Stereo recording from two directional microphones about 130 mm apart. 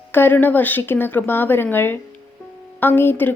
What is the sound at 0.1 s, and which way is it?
A woman's voice, 15° left (ahead or behind).